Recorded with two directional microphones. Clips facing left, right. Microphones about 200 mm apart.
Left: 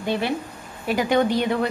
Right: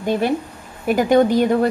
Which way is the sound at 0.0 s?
45° right (ahead or behind).